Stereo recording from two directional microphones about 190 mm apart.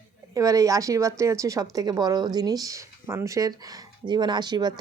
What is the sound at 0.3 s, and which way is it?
A woman's voice, 15° right (ahead or behind).